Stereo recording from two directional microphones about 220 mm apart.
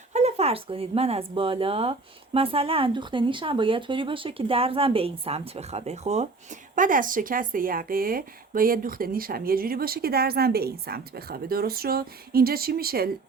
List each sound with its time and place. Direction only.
0.1 s speech: 30° right (ahead or behind)